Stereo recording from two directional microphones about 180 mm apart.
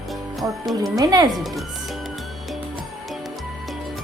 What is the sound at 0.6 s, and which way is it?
Speech, centre (ahead or behind).